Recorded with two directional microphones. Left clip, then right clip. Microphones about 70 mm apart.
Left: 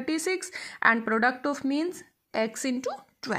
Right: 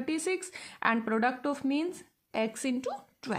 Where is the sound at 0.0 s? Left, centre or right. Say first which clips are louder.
Left 3 dB; left.